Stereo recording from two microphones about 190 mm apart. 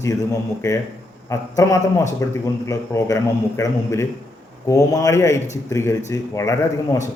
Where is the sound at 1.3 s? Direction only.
15° left (ahead or behind).